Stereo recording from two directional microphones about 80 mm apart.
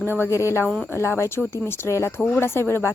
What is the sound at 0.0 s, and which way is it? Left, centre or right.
Speech, left.